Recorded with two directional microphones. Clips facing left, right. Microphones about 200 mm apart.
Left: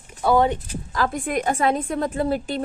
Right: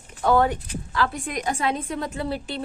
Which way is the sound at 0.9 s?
45° left (ahead or behind).